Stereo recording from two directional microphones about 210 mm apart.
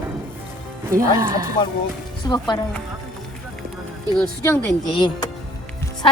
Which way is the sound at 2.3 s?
20° left (ahead or behind).